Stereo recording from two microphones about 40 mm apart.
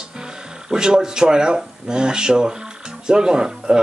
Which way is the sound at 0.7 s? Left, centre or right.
Centre.